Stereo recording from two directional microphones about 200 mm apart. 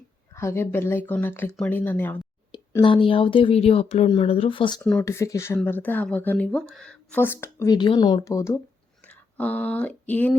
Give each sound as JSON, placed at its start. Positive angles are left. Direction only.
{"t": 0.3, "sound": "speech", "side_deg": 10}
{"t": 2.5, "sound": "speech", "side_deg": 25}
{"t": 4.8, "sound": "speech", "side_deg": 10}